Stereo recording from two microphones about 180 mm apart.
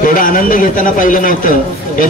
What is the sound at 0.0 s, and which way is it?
A man's voice, 50° left (ahead or behind).